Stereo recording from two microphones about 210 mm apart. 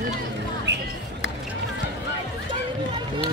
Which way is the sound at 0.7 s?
55° right (ahead or behind).